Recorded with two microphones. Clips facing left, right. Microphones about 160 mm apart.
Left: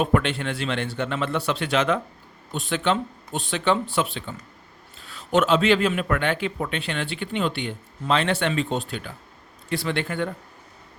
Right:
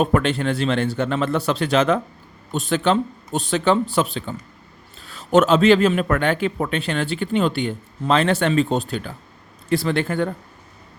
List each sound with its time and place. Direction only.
0.0 s a man's voice: 40° right (ahead or behind)